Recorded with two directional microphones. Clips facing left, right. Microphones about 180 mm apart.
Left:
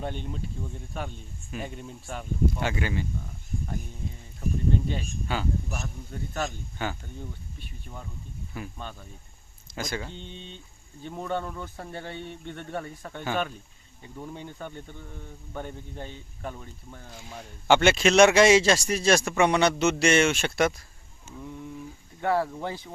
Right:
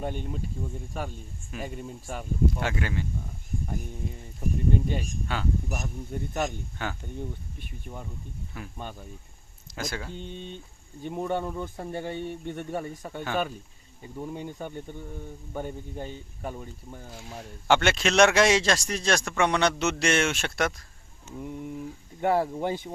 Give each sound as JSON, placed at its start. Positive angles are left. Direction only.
{"t": 0.0, "sound": "speech", "side_deg": -10}
{"t": 4.4, "sound": "speech", "side_deg": -10}
{"t": 5.3, "sound": "speech", "side_deg": 0}
{"t": 5.7, "sound": "speech", "side_deg": -20}
{"t": 6.8, "sound": "speech", "side_deg": 0}
{"t": 7.9, "sound": "speech", "side_deg": -15}
{"t": 8.5, "sound": "speech", "side_deg": 0}
{"t": 9.7, "sound": "speech", "side_deg": 0}
{"t": 10.2, "sound": "speech", "side_deg": -50}
{"t": 11.0, "sound": "speech", "side_deg": -15}
{"t": 13.2, "sound": "speech", "side_deg": 0}
{"t": 14.2, "sound": "speech", "side_deg": -10}
{"t": 22.2, "sound": "speech", "side_deg": -15}